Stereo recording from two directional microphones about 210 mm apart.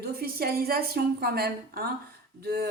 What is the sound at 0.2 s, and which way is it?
A woman's voice, 45° right (ahead or behind).